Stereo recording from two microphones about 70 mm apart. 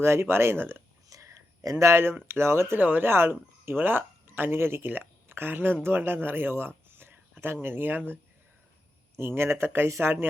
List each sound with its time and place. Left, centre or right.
0.0 s speech: right
1.1 s whispering: right
1.8 s speech: right